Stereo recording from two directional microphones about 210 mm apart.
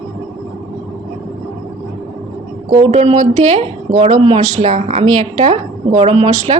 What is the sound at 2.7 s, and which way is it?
A woman's voice, 30° right (ahead or behind).